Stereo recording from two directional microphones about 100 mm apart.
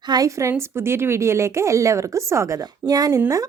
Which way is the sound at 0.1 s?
35° right (ahead or behind).